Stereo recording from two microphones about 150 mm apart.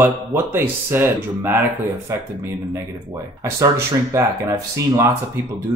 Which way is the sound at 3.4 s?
20° right (ahead or behind).